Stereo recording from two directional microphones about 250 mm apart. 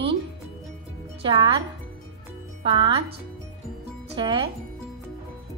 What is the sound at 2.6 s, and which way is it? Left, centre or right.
Speech, right.